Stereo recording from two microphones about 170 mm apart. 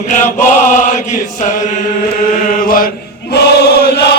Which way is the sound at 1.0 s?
45° left (ahead or behind).